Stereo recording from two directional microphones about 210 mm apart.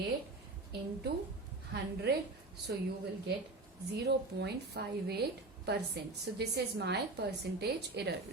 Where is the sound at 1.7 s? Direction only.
50° right (ahead or behind).